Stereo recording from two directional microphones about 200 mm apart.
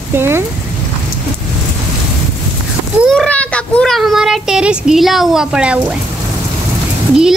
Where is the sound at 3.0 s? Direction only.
Centre (ahead or behind).